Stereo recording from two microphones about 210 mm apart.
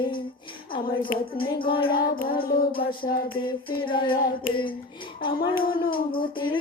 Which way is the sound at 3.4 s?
25° left (ahead or behind).